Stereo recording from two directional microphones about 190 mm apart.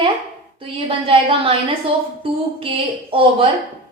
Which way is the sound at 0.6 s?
30° right (ahead or behind).